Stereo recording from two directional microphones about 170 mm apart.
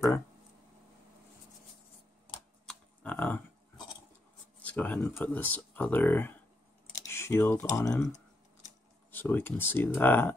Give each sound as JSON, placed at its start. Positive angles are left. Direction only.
{"t": 2.6, "sound": "typing", "side_deg": 5}
{"t": 4.6, "sound": "speech", "side_deg": 10}
{"t": 9.1, "sound": "speech", "side_deg": 10}